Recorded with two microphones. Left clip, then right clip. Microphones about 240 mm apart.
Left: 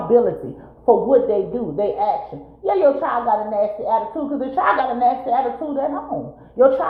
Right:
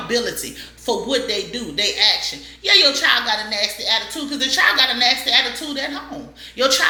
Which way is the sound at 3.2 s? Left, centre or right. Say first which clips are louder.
Left 3 dB; right.